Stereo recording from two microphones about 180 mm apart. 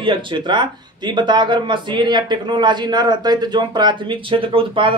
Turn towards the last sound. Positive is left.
turn(degrees=-30)  # may be behind; listen again after turning